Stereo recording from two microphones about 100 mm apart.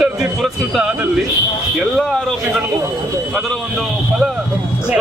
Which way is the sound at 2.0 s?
5° left (ahead or behind).